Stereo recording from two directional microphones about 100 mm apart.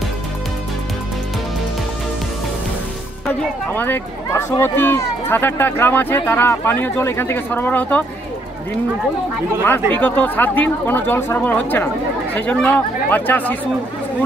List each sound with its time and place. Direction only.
3.7 s speech: 20° left (ahead or behind)
9.7 s speech: 15° left (ahead or behind)